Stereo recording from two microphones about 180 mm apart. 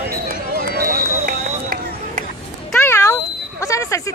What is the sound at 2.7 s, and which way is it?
Cat, 15° left (ahead or behind).